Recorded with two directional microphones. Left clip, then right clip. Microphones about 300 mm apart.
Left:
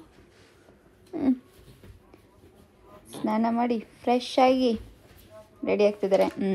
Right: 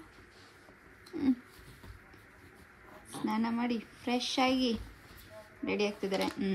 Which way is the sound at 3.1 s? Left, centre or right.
Centre.